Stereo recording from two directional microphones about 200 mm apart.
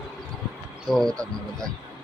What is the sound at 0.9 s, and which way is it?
Speech, centre (ahead or behind).